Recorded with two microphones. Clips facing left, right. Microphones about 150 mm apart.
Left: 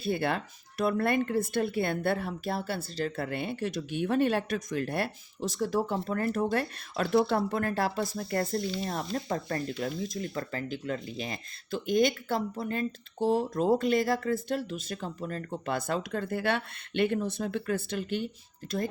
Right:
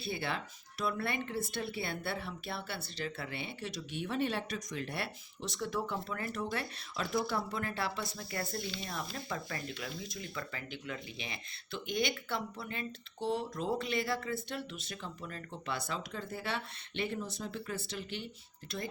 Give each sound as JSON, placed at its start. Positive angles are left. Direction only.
{"t": 0.0, "sound": "speech", "side_deg": 50}